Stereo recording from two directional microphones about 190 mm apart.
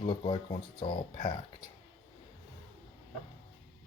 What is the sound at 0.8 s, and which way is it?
Speech, 25° left (ahead or behind).